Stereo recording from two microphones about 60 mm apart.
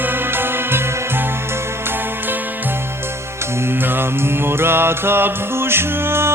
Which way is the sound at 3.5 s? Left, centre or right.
Right.